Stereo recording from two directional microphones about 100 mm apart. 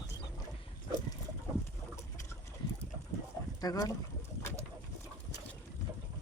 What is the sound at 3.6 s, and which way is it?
Speech, 40° left (ahead or behind).